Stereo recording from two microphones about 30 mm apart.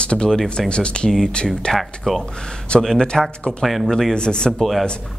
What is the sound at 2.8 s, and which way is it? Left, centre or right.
Speech, left.